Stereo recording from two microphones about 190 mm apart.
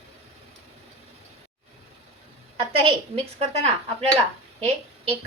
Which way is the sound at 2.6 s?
30° right (ahead or behind).